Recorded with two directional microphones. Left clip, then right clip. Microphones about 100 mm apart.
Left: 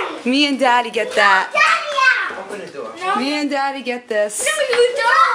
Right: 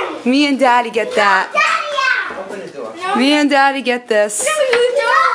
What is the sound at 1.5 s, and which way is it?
Children playing, 25° left (ahead or behind).